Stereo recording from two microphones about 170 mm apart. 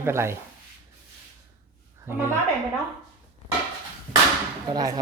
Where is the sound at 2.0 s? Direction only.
15° right (ahead or behind).